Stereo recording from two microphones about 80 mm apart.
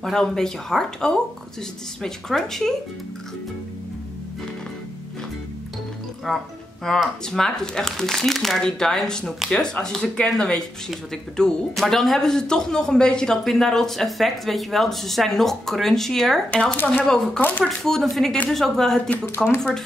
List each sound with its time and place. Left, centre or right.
0.0 s speech: centre
6.2 s speech: centre
16.7 s speech: left
17.0 s speech: centre
17.4 s speech: left
17.6 s speech: centre